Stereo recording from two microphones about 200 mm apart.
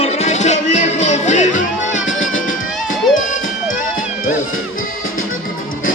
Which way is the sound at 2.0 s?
75° left (ahead or behind).